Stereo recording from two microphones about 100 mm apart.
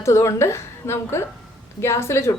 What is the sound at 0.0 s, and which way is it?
A woman's voice, 30° left (ahead or behind).